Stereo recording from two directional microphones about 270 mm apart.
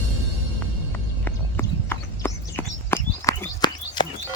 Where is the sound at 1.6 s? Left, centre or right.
Centre.